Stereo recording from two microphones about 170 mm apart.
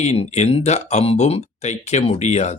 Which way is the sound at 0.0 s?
40° left (ahead or behind).